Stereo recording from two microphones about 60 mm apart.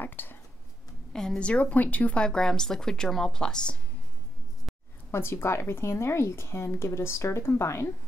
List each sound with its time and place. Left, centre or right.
0.0 s speech: left
1.1 s a woman's voice: centre
5.1 s speech: left